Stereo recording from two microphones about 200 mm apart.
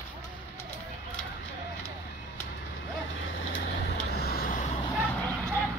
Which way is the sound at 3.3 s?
70° left (ahead or behind).